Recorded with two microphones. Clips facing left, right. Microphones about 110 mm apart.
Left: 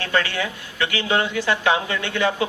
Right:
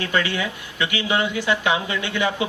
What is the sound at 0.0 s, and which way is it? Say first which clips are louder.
A man's voice: even; 20° right (ahead or behind).